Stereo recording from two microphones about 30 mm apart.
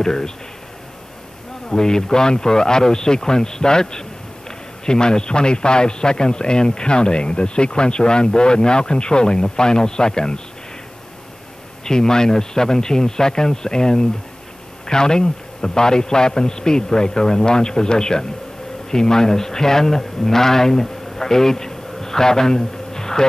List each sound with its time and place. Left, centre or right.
0.0 s a man's voice: centre
1.7 s a man's voice: left
11.8 s a man's voice: left
22.9 s insect: centre